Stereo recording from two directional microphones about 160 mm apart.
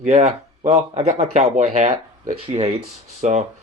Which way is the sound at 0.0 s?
40° right (ahead or behind).